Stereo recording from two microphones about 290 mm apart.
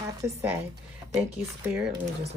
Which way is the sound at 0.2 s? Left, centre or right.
Centre.